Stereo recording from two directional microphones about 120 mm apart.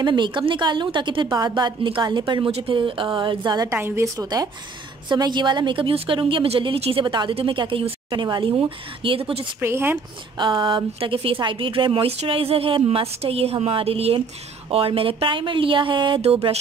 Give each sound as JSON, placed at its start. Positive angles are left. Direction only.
{"t": 0.0, "sound": "a woman's voice", "side_deg": -40}
{"t": 3.6, "sound": "a woman's voice", "side_deg": -20}
{"t": 9.6, "sound": "speech", "side_deg": -20}
{"t": 10.4, "sound": "a woman's voice", "side_deg": -40}